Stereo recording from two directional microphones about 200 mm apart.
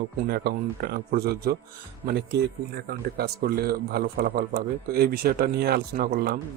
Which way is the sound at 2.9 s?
50° right (ahead or behind).